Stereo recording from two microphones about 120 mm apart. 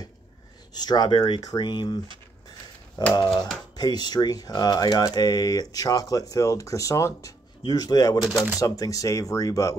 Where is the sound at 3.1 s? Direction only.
35° left (ahead or behind).